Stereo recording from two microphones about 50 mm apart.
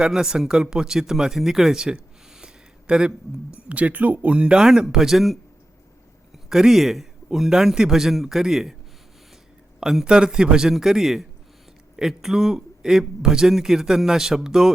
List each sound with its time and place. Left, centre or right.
0.0 s speech: centre
3.5 s a man's voice: right; by 8.7 s centre
9.9 s a man's voice: centre